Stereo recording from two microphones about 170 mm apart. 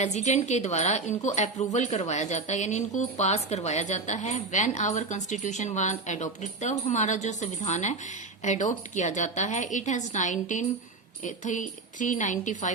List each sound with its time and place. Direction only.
0.0 s a woman's voice: 40° left (ahead or behind)